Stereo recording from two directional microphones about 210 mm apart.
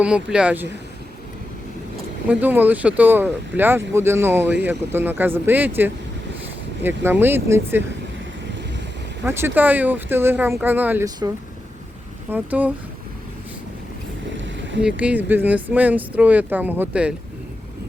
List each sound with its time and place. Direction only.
0.0 s speech: 5° right (ahead or behind)
2.2 s speech: 10° right (ahead or behind)
9.2 s speech: 10° right (ahead or behind)
12.3 s speech: 10° right (ahead or behind)
14.4 s boat: 60° right (ahead or behind)
14.8 s speech: 5° right (ahead or behind)